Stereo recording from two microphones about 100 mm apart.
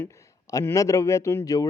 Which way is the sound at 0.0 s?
30° left (ahead or behind).